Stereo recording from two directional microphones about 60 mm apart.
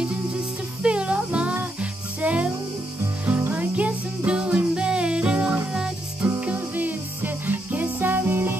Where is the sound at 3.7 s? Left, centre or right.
Right.